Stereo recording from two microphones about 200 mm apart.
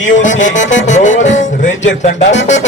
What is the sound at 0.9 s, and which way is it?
Speech, 35° left (ahead or behind).